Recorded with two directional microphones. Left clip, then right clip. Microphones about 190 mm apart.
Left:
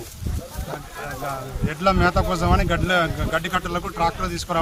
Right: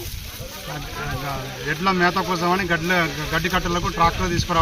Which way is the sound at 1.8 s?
30° left (ahead or behind).